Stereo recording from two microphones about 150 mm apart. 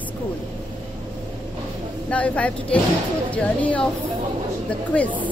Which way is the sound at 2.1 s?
10° left (ahead or behind).